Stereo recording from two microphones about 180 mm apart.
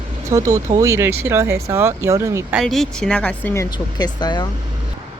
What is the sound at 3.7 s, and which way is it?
Speech, 25° left (ahead or behind).